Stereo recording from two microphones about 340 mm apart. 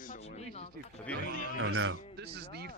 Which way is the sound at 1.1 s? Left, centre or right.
Centre.